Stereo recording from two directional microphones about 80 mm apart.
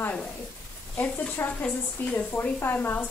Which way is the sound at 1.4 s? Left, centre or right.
Left.